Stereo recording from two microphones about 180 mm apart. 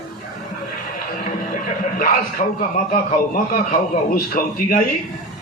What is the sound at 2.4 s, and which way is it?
Speech, 40° left (ahead or behind).